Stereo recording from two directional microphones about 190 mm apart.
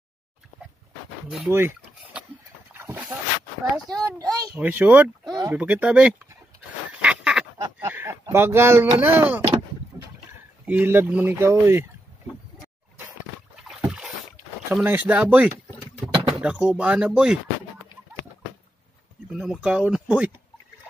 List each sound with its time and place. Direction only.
1.5 s speech: 10° right (ahead or behind)
2.7 s a sound: 10° right (ahead or behind)
3.9 s a child's voice: 20° right (ahead or behind)
4.6 s speech: 10° right (ahead or behind)
5.3 s a child's voice: 20° right (ahead or behind)
5.6 s speech: 5° right (ahead or behind)
6.9 s duck: 5° right (ahead or behind)
7.5 s a sound: 15° right (ahead or behind)
9.0 s speech: 10° right (ahead or behind)
9.9 s boat: 10° right (ahead or behind)
10.6 s speech: 10° right (ahead or behind)
13.7 s boat: 5° right (ahead or behind)
14.7 s speech: 10° right (ahead or behind)
19.3 s speech: 5° right (ahead or behind)